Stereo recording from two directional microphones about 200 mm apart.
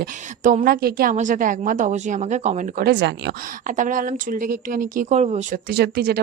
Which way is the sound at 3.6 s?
40° right (ahead or behind).